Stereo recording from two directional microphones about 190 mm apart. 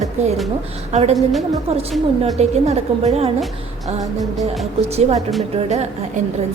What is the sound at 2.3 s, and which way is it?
Speech, 35° right (ahead or behind).